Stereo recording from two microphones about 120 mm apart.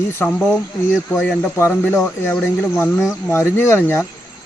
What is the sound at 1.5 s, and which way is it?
Speech, 20° left (ahead or behind).